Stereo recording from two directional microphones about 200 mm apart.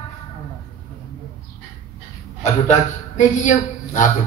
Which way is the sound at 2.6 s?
35° left (ahead or behind).